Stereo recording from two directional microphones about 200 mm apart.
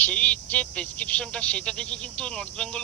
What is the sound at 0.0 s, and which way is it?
Speech, 5° left (ahead or behind).